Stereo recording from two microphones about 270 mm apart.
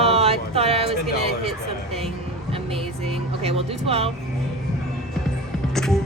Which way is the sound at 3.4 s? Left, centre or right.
Right.